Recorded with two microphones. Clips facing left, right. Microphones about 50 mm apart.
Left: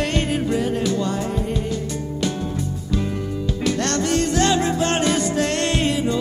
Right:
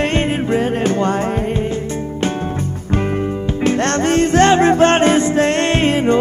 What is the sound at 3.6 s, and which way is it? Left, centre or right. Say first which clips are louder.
Music: right 6 dB; right.